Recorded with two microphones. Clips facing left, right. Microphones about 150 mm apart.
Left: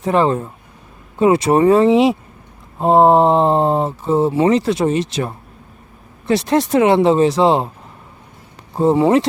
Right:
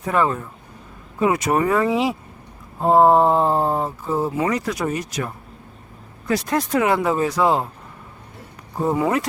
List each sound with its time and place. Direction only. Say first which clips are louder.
0.0 s speech: left 5 dB; 25° left (ahead or behind)
8.7 s speech: left 7 dB; 25° left (ahead or behind)